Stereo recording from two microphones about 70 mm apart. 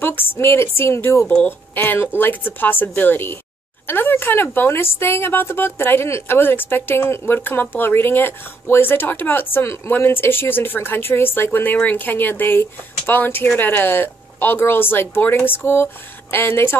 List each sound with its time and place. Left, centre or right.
0.0 s a woman's voice: left